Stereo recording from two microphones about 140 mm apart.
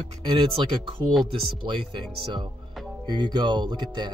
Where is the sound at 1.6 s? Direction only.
35° right (ahead or behind).